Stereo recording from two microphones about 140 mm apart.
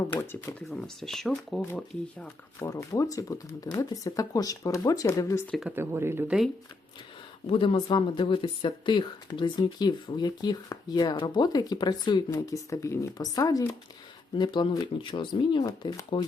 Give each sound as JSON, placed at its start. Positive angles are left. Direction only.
{"t": 0.1, "sound": "speech", "side_deg": 20}
{"t": 0.7, "sound": "speech", "side_deg": 0}
{"t": 2.6, "sound": "speech", "side_deg": 25}
{"t": 5.6, "sound": "speech", "side_deg": -15}
{"t": 7.4, "sound": "speech", "side_deg": 40}